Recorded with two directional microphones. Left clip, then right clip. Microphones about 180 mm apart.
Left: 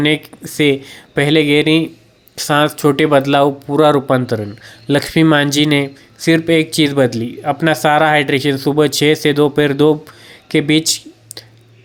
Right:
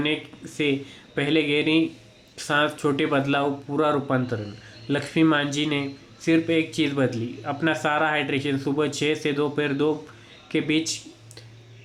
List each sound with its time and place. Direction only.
0.0 s speech: 50° left (ahead or behind)